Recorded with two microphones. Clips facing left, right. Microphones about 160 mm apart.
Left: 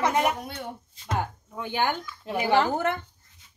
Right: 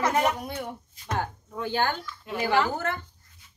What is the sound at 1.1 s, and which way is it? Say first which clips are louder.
Speech: even; 10° left (ahead or behind).